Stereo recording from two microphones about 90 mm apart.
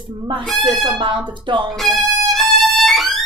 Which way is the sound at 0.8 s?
60° right (ahead or behind).